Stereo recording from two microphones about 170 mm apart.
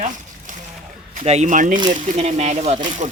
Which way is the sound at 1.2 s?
45° right (ahead or behind).